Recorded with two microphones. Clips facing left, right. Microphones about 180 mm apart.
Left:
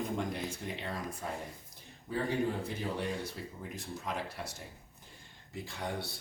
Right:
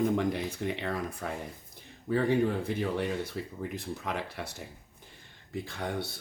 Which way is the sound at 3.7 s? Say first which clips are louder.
Right 2 dB; 60° right (ahead or behind).